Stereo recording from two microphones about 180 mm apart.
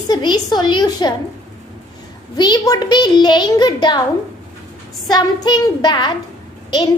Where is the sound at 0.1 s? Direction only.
25° left (ahead or behind).